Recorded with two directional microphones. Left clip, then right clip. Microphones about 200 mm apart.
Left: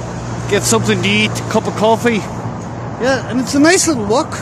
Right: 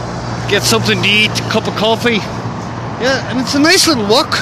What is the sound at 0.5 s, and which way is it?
Speech, 20° left (ahead or behind).